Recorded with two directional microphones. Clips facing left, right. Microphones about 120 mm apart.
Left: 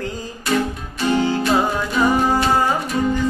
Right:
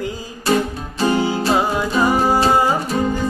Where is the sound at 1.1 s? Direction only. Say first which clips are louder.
Left 3 dB; 10° right (ahead or behind).